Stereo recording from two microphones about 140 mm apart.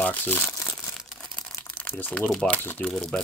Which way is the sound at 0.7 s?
Centre (ahead or behind).